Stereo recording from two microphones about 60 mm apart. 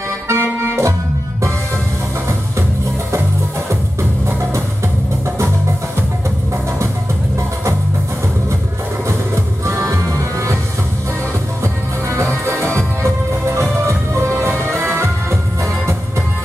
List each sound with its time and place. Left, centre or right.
0.3 s accordion: right
9.3 s music: right
11.6 s music: right